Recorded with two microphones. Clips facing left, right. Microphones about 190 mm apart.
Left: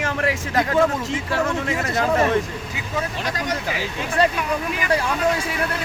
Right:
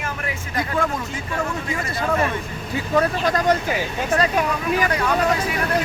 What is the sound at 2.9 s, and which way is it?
Speech, 55° right (ahead or behind).